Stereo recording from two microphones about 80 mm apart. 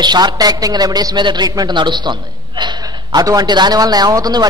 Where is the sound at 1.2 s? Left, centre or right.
Right.